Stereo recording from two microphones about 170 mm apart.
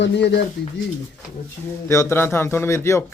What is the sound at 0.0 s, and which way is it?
Speech, 90° left.